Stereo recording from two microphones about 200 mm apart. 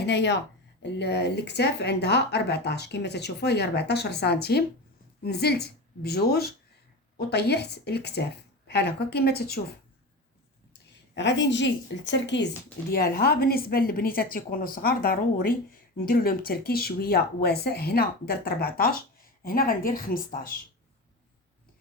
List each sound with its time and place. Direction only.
0.0 s speech: 60° left (ahead or behind)
11.1 s speech: 65° left (ahead or behind)
12.9 s speech: 50° left (ahead or behind)